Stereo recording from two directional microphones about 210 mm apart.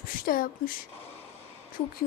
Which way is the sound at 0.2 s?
40° left (ahead or behind).